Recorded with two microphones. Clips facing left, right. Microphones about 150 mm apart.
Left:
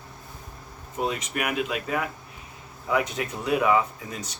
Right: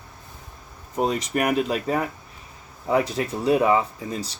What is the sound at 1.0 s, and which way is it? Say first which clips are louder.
Speech: right 5 dB; 40° right (ahead or behind).